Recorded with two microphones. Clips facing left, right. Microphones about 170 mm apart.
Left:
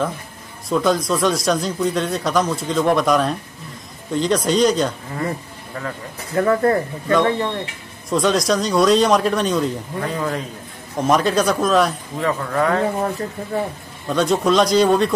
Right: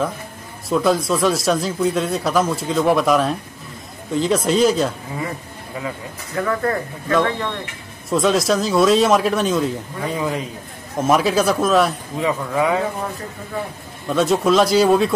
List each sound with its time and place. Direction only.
0.7 s speech: 5° right (ahead or behind)
6.4 s speech: 30° left (ahead or behind)
8.1 s speech: centre (ahead or behind)
14.0 s speech: centre (ahead or behind)